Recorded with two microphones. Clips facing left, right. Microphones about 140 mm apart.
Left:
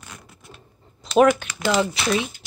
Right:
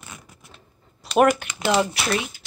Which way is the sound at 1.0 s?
10° right (ahead or behind).